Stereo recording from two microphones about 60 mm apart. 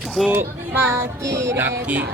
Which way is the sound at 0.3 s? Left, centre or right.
Right.